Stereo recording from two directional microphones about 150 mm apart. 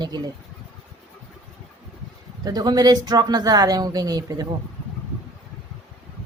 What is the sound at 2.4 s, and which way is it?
Speech, 25° right (ahead or behind).